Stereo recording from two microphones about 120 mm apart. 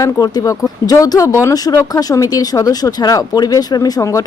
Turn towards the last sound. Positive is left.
turn(degrees=30)  # may be behind; listen again after turning